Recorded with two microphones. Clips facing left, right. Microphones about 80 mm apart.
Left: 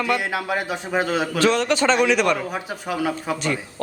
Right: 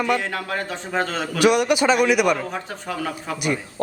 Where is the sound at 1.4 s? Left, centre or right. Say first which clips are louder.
Right 3 dB; centre.